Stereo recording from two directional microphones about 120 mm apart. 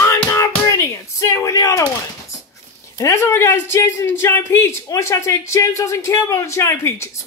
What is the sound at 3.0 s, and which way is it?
Speech, 25° left (ahead or behind).